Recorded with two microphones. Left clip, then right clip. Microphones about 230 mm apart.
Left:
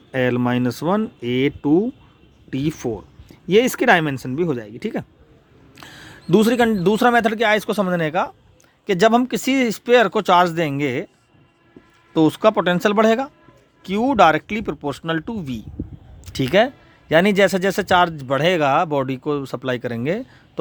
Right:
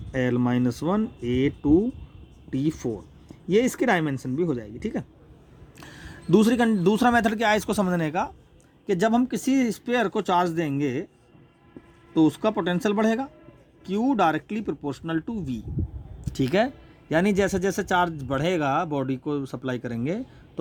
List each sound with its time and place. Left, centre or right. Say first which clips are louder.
0.1 s a man's voice: left 5 dB; left
8.9 s speech: left 7 dB; left
12.1 s a man's voice: left 6 dB; left